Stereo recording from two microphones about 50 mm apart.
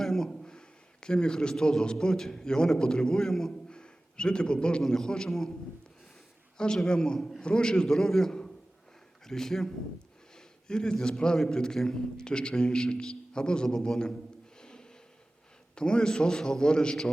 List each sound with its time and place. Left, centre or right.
0.0 s a sound: centre
1.0 s a man's voice: centre
3.7 s a sound: centre
4.8 s a man's voice: centre
6.6 s a man's voice: centre
10.3 s a sound: centre
11.3 s a man's voice: centre
14.6 s snort: centre
15.7 s a man's voice: centre